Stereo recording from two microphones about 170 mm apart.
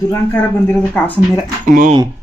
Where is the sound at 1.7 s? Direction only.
50° right (ahead or behind).